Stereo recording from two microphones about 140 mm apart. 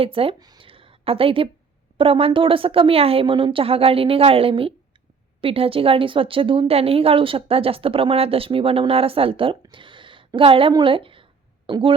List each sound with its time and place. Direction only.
0.0 s a woman's voice: 40° right (ahead or behind)
0.3 s a woman's voice: 30° right (ahead or behind)
9.6 s a sound: 35° right (ahead or behind)